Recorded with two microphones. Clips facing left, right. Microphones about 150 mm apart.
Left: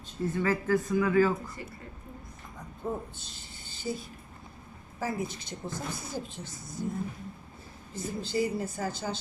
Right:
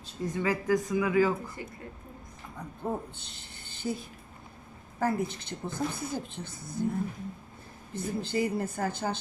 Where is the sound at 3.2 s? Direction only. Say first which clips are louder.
Even; 60° right (ahead or behind).